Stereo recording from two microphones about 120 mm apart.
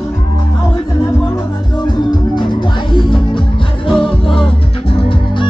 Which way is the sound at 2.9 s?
40° left (ahead or behind).